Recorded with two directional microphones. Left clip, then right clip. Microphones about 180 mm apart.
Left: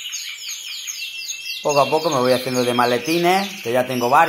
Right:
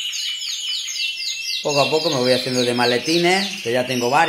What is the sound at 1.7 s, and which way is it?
Speech, 10° right (ahead or behind).